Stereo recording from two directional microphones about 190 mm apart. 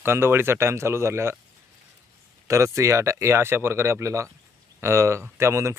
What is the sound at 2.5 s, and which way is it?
Speech, 15° right (ahead or behind).